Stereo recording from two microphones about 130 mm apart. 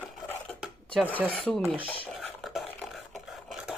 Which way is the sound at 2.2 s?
Centre (ahead or behind).